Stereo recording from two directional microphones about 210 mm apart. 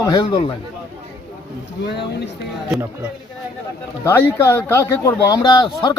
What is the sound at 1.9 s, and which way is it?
Speech, 55° left (ahead or behind).